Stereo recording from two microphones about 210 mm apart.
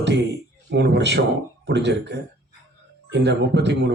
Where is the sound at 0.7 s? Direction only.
55° right (ahead or behind).